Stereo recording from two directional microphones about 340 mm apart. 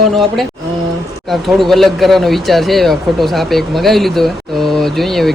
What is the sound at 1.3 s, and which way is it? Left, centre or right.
Speech, centre.